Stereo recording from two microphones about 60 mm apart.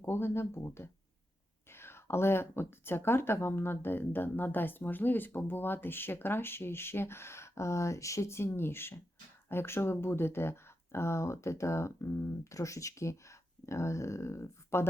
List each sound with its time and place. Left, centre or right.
0.0 s speech: left
8.5 s speech: left